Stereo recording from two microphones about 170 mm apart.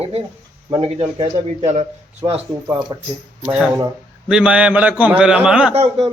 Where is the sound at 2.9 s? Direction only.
20° right (ahead or behind).